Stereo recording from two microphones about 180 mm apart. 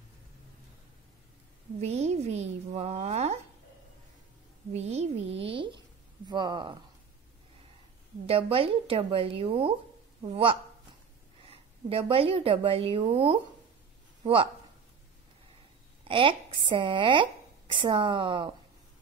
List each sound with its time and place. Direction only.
1.8 s a woman's voice: 35° right (ahead or behind)
4.7 s speech: 35° right (ahead or behind)
8.3 s a woman's voice: 30° right (ahead or behind)
16.0 s speech: 30° right (ahead or behind)